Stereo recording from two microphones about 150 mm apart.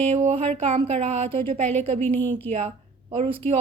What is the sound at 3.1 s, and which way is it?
Speech, 35° right (ahead or behind).